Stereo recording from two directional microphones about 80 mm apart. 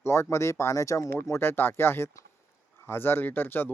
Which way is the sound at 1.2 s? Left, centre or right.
Left.